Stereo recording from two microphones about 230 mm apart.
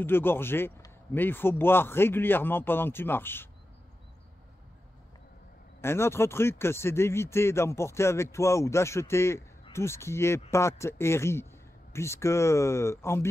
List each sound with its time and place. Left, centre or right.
0.0 s speech: centre
5.8 s speech: centre